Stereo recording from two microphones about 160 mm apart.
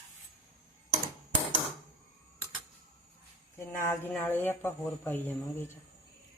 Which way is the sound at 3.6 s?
15° left (ahead or behind).